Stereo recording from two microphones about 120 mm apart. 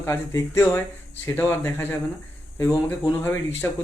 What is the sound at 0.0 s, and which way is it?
Speech, 20° left (ahead or behind).